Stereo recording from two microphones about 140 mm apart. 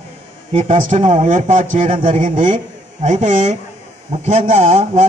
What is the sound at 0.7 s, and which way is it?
Speech, 65° right (ahead or behind).